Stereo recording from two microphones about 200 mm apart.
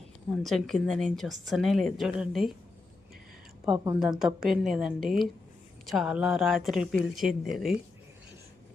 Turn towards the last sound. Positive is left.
turn(degrees=0)  # may be behind; listen again after turning